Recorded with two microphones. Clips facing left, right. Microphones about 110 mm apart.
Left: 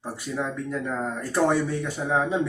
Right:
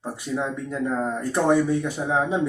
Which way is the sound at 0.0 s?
20° right (ahead or behind).